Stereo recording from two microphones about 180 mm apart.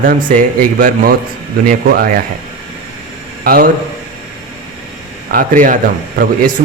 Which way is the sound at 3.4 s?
55° right (ahead or behind).